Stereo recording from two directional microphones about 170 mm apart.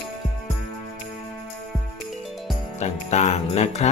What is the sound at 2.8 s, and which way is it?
Speech, 40° left (ahead or behind).